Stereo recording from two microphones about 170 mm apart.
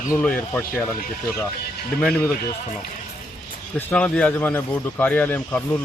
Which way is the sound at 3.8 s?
10° left (ahead or behind).